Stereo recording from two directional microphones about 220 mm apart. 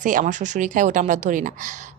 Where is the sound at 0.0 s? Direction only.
35° right (ahead or behind).